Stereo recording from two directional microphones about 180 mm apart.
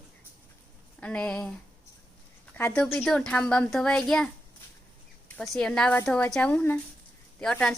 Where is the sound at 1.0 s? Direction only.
5° left (ahead or behind).